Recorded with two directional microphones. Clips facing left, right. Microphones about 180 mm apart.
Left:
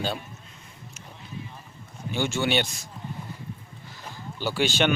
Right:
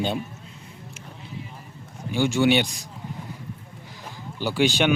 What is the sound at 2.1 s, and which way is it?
Speech, 10° right (ahead or behind).